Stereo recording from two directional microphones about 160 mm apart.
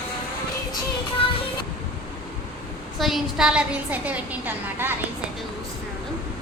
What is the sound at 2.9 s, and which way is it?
A woman's voice, centre (ahead or behind).